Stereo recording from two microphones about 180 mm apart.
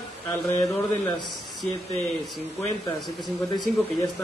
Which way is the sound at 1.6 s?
Centre (ahead or behind).